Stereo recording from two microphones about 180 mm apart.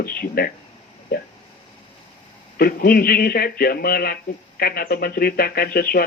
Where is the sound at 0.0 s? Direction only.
55° left (ahead or behind).